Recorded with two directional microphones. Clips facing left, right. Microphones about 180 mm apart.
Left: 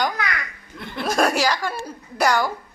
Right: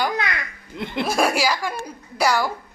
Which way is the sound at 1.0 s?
10° right (ahead or behind).